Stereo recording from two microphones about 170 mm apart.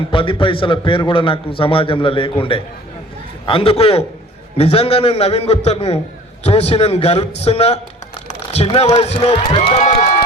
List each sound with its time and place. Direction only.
0.1 s a man's voice: 30° left (ahead or behind); by 10.2 s 45° left (ahead or behind)